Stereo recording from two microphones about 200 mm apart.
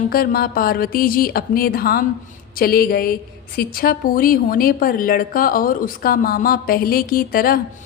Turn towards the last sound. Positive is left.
turn(degrees=45)  # may be behind; listen again after turning